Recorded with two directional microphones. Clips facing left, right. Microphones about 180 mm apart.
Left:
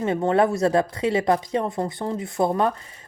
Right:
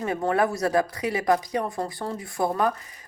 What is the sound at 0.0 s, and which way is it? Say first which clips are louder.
Speech: left 4 dB; 25° left (ahead or behind).